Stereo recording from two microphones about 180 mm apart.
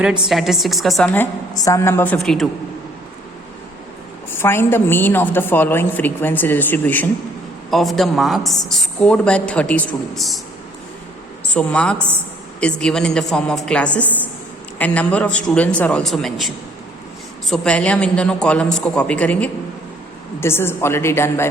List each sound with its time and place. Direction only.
0.0 s a woman's voice: 5° right (ahead or behind)
4.4 s a woman's voice: 10° left (ahead or behind)
11.5 s a woman's voice: 5° left (ahead or behind)
17.5 s a woman's voice: 5° left (ahead or behind)